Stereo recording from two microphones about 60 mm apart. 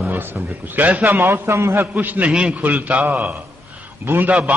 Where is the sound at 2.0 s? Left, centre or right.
Right.